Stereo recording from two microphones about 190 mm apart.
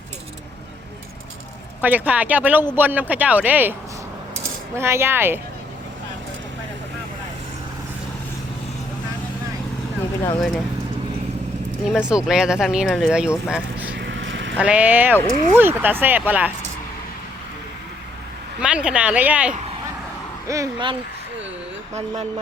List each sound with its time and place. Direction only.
1.8 s speech: 10° right (ahead or behind)
4.8 s speech: 15° right (ahead or behind)
11.9 s speech: 5° right (ahead or behind)
14.2 s vehicle: 75° right (ahead or behind)
14.6 s speech: 5° right (ahead or behind)
18.6 s speech: 5° right (ahead or behind)
20.5 s speech: 20° right (ahead or behind)
21.9 s speech: 35° right (ahead or behind)